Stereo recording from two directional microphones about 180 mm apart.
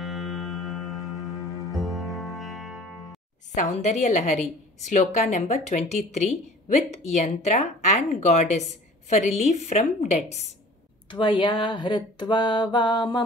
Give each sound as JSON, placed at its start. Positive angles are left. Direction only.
{"t": 0.0, "sound": "music", "side_deg": 0}
{"t": 3.5, "sound": "a woman's voice", "side_deg": 40}
{"t": 11.1, "sound": "mantra", "side_deg": 25}